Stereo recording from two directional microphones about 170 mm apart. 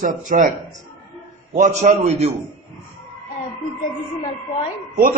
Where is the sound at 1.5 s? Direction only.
45° right (ahead or behind).